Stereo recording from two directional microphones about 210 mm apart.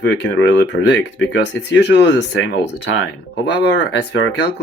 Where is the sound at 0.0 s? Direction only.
60° left (ahead or behind).